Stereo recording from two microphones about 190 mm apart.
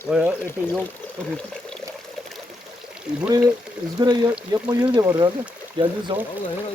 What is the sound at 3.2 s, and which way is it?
Speech, 20° right (ahead or behind).